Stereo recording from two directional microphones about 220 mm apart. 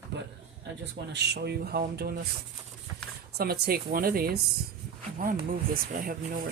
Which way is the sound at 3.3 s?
45° right (ahead or behind).